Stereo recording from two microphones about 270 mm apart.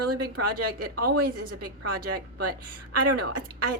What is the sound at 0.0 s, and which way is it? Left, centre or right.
A woman's voice, right.